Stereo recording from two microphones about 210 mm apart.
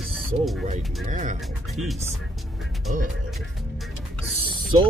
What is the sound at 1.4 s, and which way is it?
Speech, centre (ahead or behind).